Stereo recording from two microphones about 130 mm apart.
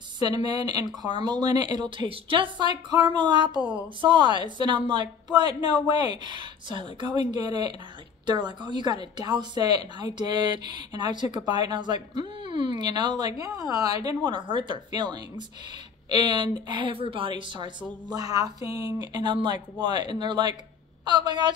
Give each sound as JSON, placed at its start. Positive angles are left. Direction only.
{"t": 0.2, "sound": "speech", "side_deg": -30}